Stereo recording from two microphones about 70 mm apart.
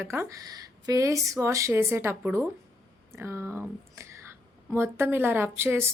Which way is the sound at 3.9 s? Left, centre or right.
Right.